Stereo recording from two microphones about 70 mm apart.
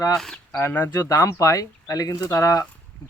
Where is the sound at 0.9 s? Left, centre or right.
Left.